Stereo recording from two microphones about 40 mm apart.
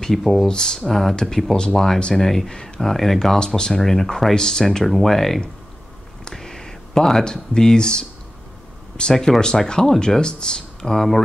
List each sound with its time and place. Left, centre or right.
0.0 s speech: centre
0.5 s speech: centre